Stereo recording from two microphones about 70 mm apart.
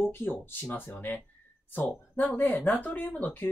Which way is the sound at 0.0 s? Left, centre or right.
Left.